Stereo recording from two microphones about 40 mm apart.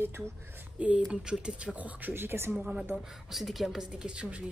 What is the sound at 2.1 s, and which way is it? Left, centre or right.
Speech, right.